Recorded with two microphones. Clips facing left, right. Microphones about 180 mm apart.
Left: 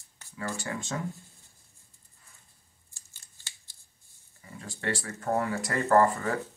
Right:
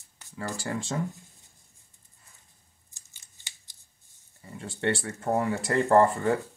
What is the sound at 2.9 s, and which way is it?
Scissors, 15° right (ahead or behind).